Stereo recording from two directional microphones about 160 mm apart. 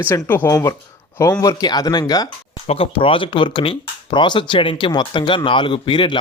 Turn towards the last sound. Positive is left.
turn(degrees=30)  # may be behind; listen again after turning